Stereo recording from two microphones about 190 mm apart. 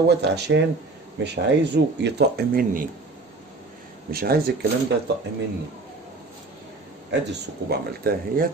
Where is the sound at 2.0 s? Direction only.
60° right (ahead or behind).